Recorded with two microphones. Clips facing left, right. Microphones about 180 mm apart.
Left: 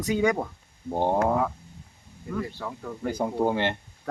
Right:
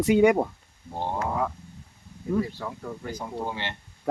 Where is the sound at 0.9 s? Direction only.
50° left (ahead or behind).